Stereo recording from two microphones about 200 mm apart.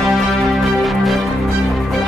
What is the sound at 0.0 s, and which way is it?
Music, centre (ahead or behind).